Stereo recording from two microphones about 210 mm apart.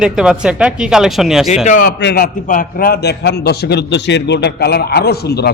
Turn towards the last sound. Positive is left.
turn(degrees=50)  # may be behind; listen again after turning